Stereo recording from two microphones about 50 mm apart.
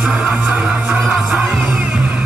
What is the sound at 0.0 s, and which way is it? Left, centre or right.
Music, centre.